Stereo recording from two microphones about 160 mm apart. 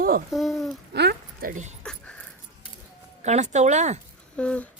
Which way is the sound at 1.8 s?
5° left (ahead or behind).